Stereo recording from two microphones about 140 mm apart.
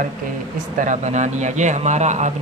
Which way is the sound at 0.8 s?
60° right (ahead or behind).